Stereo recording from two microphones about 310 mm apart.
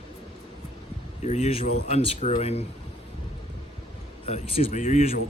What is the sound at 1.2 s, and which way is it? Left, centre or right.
Speech, left.